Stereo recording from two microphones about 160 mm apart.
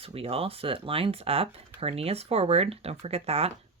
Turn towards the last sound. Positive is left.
turn(degrees=-40)  # may be behind; listen again after turning